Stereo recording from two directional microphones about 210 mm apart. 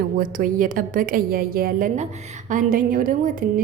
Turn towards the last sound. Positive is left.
turn(degrees=-45)  # may be behind; listen again after turning